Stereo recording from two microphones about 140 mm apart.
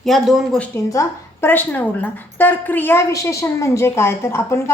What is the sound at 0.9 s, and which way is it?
A woman's voice, 20° left (ahead or behind).